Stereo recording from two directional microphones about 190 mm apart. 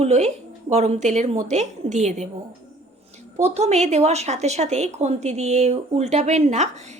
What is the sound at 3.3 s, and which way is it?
A woman's voice, 35° right (ahead or behind).